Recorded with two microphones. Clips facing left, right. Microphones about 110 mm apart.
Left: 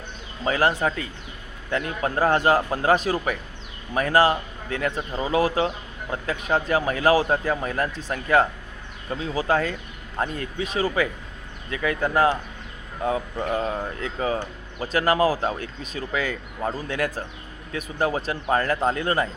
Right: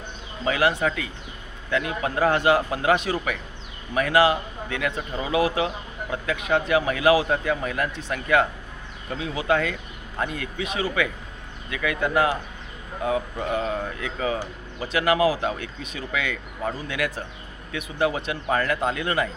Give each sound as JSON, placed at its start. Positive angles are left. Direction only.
{"t": 0.4, "sound": "speech", "side_deg": 35}
{"t": 13.6, "sound": "speech", "side_deg": 25}
{"t": 14.0, "sound": "speech", "side_deg": 35}